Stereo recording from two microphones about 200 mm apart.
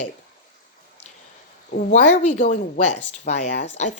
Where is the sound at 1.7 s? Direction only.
35° left (ahead or behind).